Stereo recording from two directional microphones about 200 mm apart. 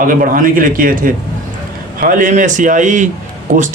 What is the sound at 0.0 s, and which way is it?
A man's voice, 45° right (ahead or behind).